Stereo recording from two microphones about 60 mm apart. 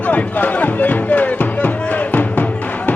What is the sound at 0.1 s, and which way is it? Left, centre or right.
Music, left.